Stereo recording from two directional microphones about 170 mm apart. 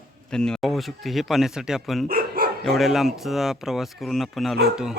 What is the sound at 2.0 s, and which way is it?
Speech, 60° right (ahead or behind).